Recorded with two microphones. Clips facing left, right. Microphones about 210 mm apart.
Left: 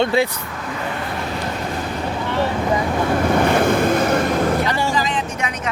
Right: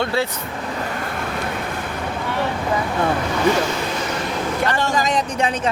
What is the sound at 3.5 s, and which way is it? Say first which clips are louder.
Vehicle: left 6 dB; 55° left (ahead or behind).